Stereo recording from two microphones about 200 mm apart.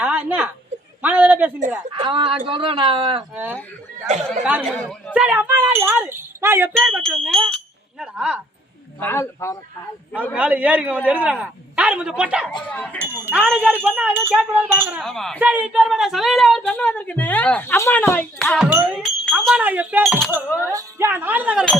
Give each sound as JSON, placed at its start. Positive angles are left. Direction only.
{"t": 0.0, "sound": "a sound", "side_deg": -10}
{"t": 1.9, "sound": "a man's voice", "side_deg": -25}
{"t": 3.3, "sound": "speech", "side_deg": -10}
{"t": 4.7, "sound": "speech", "side_deg": 5}
{"t": 9.0, "sound": "a man's voice", "side_deg": 10}
{"t": 10.3, "sound": "speech", "side_deg": -10}
{"t": 12.7, "sound": "a man's voice", "side_deg": 5}
{"t": 13.0, "sound": "speech", "side_deg": -10}